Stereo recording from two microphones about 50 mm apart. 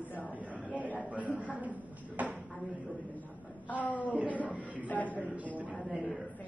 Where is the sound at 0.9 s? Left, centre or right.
Right.